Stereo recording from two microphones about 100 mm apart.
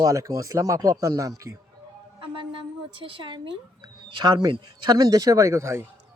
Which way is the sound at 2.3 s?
60° right (ahead or behind).